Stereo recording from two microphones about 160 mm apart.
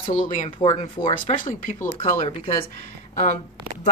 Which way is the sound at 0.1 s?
55° left (ahead or behind).